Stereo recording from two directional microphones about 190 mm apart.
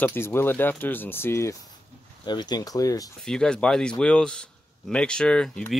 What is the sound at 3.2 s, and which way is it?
Speech, 5° left (ahead or behind).